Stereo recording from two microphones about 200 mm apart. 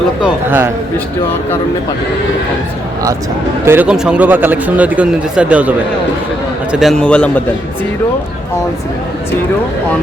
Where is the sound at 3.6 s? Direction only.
10° right (ahead or behind); by 7.3 s 5° left (ahead or behind).